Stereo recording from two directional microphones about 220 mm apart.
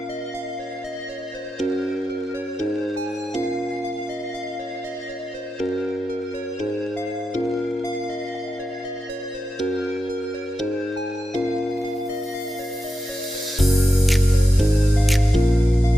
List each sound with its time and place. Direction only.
15.0 s music: centre (ahead or behind)